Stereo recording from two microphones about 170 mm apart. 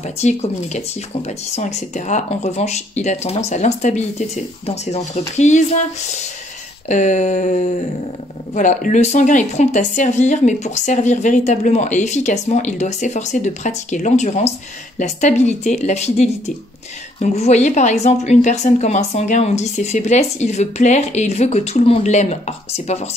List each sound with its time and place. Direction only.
0.0 s speech: 40° left (ahead or behind)